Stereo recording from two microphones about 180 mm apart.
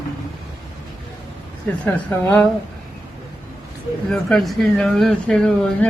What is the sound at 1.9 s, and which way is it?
Speech, 10° left (ahead or behind).